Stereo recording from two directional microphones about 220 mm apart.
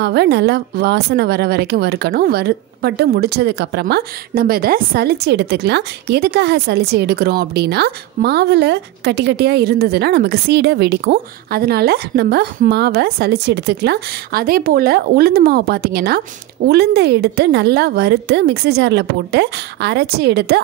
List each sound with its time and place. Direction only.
0.0 s a woman's voice: 50° right (ahead or behind)